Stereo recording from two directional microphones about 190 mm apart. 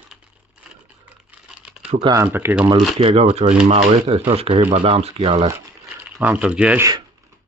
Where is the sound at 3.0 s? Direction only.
35° right (ahead or behind).